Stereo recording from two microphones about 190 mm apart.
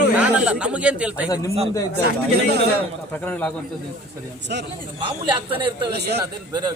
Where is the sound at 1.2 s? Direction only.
20° left (ahead or behind).